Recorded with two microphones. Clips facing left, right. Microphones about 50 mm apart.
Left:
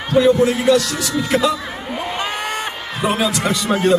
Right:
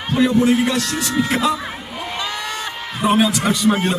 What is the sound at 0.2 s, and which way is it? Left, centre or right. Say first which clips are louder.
Speech: left 2 dB; centre.